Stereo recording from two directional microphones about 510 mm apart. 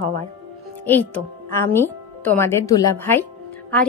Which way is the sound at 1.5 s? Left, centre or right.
Centre.